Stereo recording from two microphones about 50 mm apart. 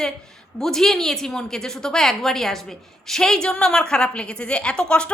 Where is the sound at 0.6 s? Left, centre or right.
Centre.